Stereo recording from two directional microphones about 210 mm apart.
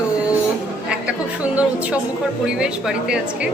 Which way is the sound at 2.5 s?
5° right (ahead or behind).